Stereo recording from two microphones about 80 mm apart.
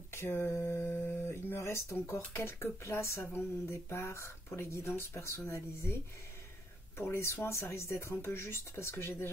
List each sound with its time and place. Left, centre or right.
0.1 s speech: left
7.0 s speech: left